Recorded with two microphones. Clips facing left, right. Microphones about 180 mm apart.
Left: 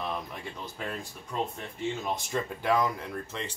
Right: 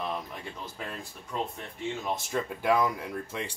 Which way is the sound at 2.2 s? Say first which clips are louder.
Right 2 dB; 5° right (ahead or behind).